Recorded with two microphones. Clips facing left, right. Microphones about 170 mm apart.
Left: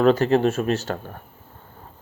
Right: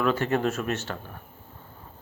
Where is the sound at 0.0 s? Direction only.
35° left (ahead or behind).